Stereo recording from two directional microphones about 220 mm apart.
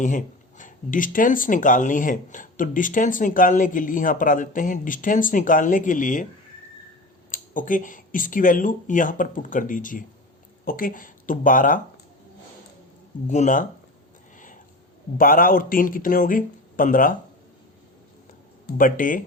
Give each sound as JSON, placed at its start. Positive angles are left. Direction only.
{"t": 0.0, "sound": "speech", "side_deg": 35}
{"t": 7.3, "sound": "speech", "side_deg": 35}
{"t": 13.2, "sound": "speech", "side_deg": 35}
{"t": 14.3, "sound": "a sound", "side_deg": 35}
{"t": 15.2, "sound": "speech", "side_deg": 40}
{"t": 18.6, "sound": "speech", "side_deg": 40}